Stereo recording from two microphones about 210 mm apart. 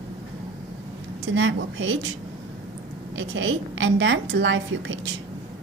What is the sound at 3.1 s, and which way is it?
A woman's voice, 65° right (ahead or behind).